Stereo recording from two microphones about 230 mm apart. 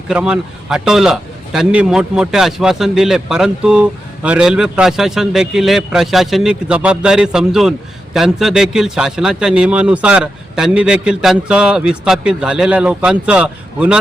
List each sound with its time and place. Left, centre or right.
0.1 s a man's voice: centre